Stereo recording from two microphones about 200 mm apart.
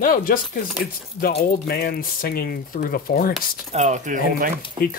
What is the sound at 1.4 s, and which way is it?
Speech, 50° left (ahead or behind).